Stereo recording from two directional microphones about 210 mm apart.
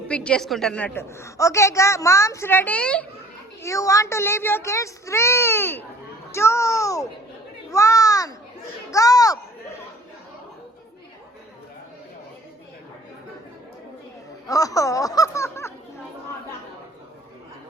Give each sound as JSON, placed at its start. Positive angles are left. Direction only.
{"t": 0.1, "sound": "a woman's voice", "side_deg": 5}
{"t": 14.4, "sound": "a woman's voice", "side_deg": 15}